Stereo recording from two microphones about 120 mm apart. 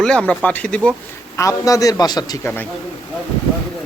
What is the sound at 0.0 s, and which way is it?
Speech, 10° left (ahead or behind).